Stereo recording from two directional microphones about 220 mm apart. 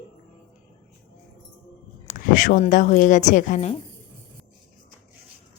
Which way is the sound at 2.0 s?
35° left (ahead or behind).